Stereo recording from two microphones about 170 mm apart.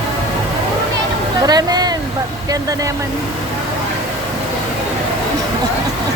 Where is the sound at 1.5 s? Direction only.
25° right (ahead or behind).